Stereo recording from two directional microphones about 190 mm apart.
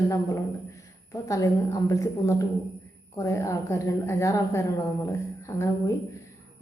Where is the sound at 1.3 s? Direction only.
15° left (ahead or behind).